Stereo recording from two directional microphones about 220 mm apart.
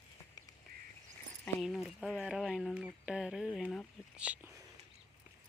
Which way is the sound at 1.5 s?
Centre (ahead or behind).